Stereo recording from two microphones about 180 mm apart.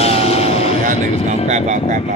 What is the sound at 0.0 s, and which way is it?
Vehicle, 35° left (ahead or behind).